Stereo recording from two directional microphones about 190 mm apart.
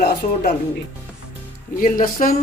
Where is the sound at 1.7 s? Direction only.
45° left (ahead or behind).